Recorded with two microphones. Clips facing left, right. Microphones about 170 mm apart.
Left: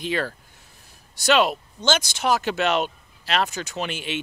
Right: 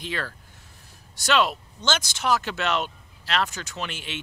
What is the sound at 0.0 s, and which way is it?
Speech, 15° left (ahead or behind).